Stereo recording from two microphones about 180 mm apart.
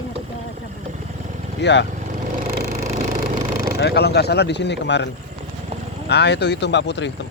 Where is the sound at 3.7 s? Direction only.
65° left (ahead or behind).